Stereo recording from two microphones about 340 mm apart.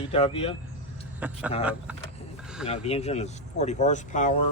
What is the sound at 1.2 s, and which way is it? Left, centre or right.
Speech, centre.